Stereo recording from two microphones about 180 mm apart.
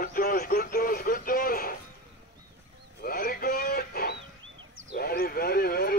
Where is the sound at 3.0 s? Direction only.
55° left (ahead or behind).